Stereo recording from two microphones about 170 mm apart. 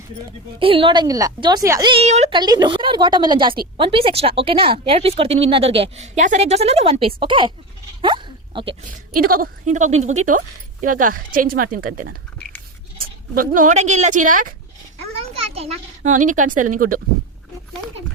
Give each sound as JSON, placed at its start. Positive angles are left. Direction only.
{"t": 0.6, "sound": "a woman's voice", "side_deg": -30}
{"t": 1.9, "sound": "a woman's voice", "side_deg": -40}
{"t": 2.3, "sound": "a woman's voice", "side_deg": -25}
{"t": 8.0, "sound": "a sound", "side_deg": -30}
{"t": 8.8, "sound": "a woman's voice", "side_deg": -55}
{"t": 13.3, "sound": "a woman's voice", "side_deg": -55}
{"t": 15.1, "sound": "a woman's voice", "side_deg": -35}